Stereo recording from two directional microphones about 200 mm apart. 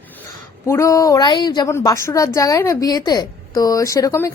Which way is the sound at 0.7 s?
15° left (ahead or behind).